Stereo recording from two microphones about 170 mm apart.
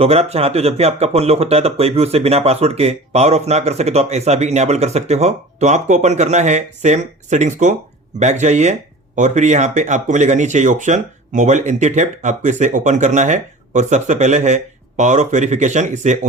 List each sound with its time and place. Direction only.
0.0 s speech: 35° right (ahead or behind)